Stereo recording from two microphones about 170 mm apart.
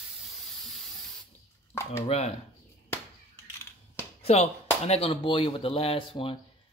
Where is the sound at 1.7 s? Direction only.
15° left (ahead or behind).